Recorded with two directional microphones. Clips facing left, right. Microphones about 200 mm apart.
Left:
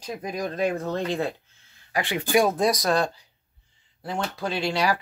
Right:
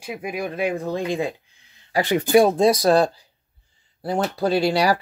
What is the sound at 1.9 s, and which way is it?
Speech, 40° right (ahead or behind).